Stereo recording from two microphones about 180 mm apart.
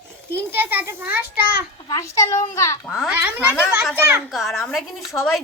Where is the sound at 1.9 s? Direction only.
15° left (ahead or behind).